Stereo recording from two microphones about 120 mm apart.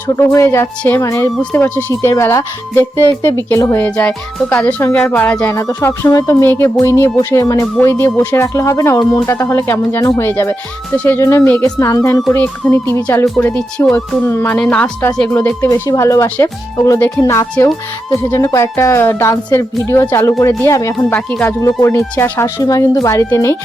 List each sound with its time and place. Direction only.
0.2 s speech: 25° left (ahead or behind)
3.8 s speech: 15° left (ahead or behind)
5.5 s speech: 25° left (ahead or behind)
12.6 s speech: 10° left (ahead or behind)
13.1 s speech: 20° left (ahead or behind)
13.9 s speech: 20° left (ahead or behind)
14.5 s speech: 10° left (ahead or behind)
15.3 s speech: 20° left (ahead or behind)
21.1 s speech: 10° left (ahead or behind)
21.6 s speech: 25° left (ahead or behind)